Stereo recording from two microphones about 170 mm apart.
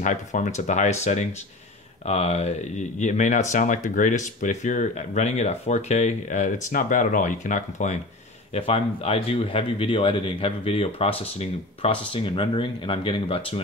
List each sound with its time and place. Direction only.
0.0 s speech: 45° left (ahead or behind)
8.5 s speech: 35° left (ahead or behind)